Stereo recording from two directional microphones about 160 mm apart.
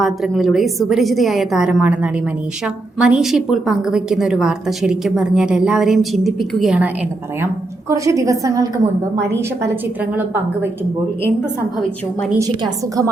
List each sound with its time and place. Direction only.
0.0 s a woman's voice: centre (ahead or behind)
7.4 s a woman's voice: 20° right (ahead or behind)
12.4 s a woman's voice: 20° right (ahead or behind)